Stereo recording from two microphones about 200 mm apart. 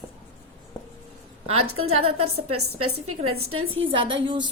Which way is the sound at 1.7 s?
30° right (ahead or behind).